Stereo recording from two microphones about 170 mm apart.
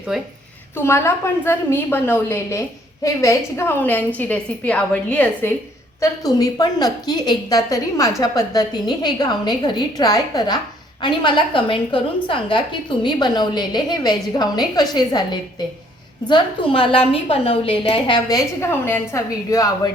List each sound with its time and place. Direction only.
0.1 s a woman's voice: centre (ahead or behind)
0.8 s a woman's voice: 15° left (ahead or behind)
6.0 s a woman's voice: 20° left (ahead or behind)